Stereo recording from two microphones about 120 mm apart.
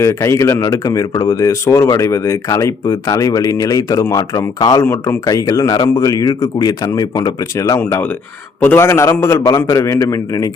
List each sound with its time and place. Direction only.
0.0 s speech: 25° left (ahead or behind)